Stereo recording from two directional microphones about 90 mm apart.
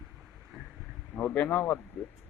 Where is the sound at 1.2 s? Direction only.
15° left (ahead or behind).